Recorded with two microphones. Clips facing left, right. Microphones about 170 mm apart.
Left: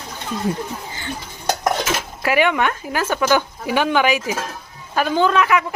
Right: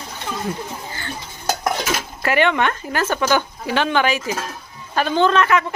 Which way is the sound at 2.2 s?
5° left (ahead or behind).